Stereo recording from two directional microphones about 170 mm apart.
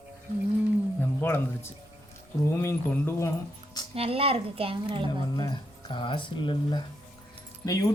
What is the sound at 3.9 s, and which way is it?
Speech, 35° right (ahead or behind).